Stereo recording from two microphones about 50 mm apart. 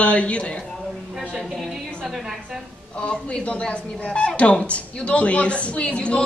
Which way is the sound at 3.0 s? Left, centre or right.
Left.